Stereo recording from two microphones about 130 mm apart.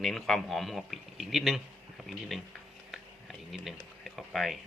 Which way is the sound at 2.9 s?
Centre (ahead or behind).